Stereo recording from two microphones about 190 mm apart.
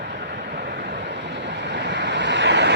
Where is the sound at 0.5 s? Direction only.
60° right (ahead or behind).